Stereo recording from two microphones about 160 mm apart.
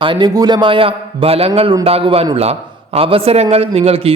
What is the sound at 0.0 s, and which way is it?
A man's voice, 30° right (ahead or behind).